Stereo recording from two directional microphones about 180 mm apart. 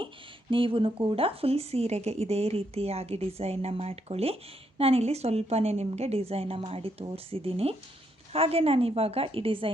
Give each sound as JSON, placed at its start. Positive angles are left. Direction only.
{"t": 0.5, "sound": "a woman's voice", "side_deg": -30}